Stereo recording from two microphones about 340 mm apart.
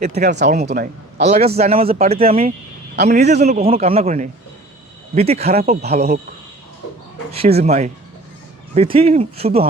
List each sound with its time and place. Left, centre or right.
0.0 s a man's voice: right
2.9 s a man's voice: right
7.3 s a man's voice: centre